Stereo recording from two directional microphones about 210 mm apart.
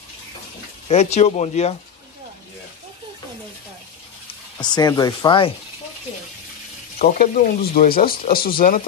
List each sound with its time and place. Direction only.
0.8 s speech: 30° left (ahead or behind)
4.6 s speech: 20° left (ahead or behind)
7.2 s speech: 45° left (ahead or behind)